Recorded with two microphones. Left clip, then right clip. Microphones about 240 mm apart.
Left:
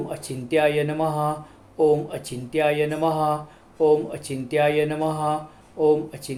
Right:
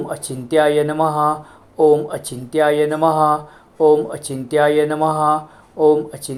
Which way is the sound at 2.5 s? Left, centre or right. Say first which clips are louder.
Right 6 dB; centre.